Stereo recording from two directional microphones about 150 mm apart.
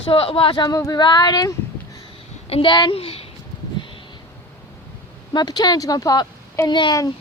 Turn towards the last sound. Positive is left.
turn(degrees=30)  # may be behind; listen again after turning